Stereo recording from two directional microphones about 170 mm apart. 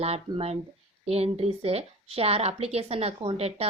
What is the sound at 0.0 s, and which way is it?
A woman's voice, 35° right (ahead or behind).